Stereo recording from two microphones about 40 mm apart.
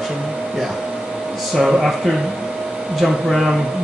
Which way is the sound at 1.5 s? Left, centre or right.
Centre.